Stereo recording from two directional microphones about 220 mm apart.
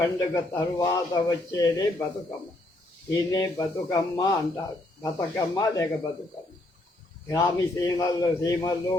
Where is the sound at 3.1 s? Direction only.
15° left (ahead or behind).